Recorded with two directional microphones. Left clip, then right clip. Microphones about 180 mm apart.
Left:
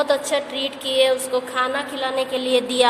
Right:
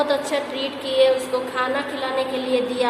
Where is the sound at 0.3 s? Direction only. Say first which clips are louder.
Left 1 dB; 45° left (ahead or behind).